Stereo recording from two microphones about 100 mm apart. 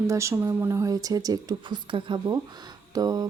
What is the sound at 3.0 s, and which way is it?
Speech, 40° right (ahead or behind).